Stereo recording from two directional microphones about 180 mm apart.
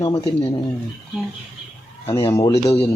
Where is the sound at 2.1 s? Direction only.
15° left (ahead or behind).